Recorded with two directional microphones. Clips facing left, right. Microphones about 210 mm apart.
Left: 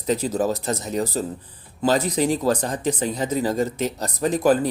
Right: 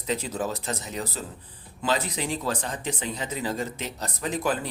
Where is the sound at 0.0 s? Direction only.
40° left (ahead or behind).